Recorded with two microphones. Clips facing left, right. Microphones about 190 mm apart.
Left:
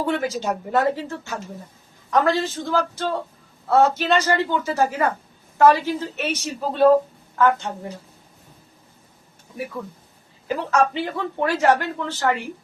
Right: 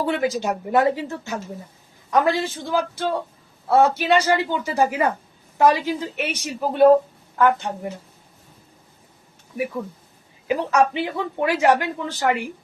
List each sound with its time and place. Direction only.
0.0 s speech: 15° right (ahead or behind)
10.4 s speech: 15° right (ahead or behind)